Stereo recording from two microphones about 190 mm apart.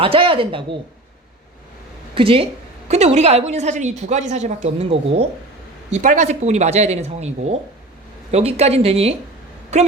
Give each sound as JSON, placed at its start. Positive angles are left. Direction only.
{"t": 0.0, "sound": "speech", "side_deg": -30}
{"t": 2.1, "sound": "a woman's voice", "side_deg": -30}
{"t": 5.9, "sound": "a woman's voice", "side_deg": -45}
{"t": 8.3, "sound": "a woman's voice", "side_deg": -35}